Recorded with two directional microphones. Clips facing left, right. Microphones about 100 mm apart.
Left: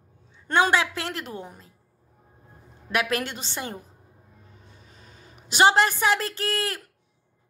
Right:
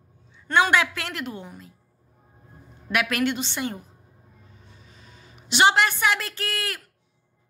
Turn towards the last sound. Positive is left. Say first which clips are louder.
# left 3 dB
turn(degrees=30)  # may be behind; listen again after turning